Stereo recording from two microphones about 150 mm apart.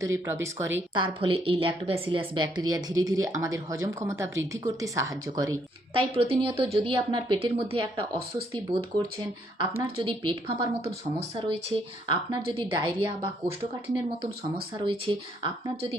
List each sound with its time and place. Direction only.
0.0 s speech: 20° right (ahead or behind)
0.9 s a woman's voice: 35° right (ahead or behind)
5.9 s a woman's voice: 40° right (ahead or behind)
9.6 s a woman's voice: 35° right (ahead or behind)
14.8 s a woman's voice: 35° right (ahead or behind)